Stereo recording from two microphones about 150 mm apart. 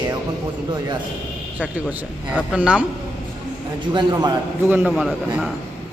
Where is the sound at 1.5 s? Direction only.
10° right (ahead or behind).